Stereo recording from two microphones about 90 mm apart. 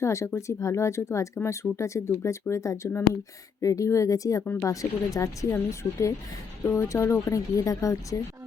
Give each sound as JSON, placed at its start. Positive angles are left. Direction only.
{"t": 0.0, "sound": "speech", "side_deg": 35}
{"t": 4.4, "sound": "speech", "side_deg": 25}
{"t": 4.7, "sound": "speech", "side_deg": 40}
{"t": 6.7, "sound": "speech", "side_deg": 35}